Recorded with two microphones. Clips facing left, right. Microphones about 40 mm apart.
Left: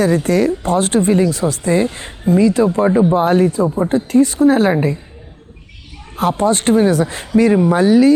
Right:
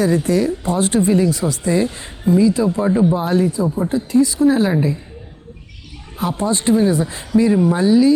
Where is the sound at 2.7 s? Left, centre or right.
Left.